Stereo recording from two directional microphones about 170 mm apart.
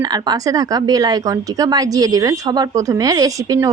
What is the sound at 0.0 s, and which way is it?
A woman's voice, 25° right (ahead or behind).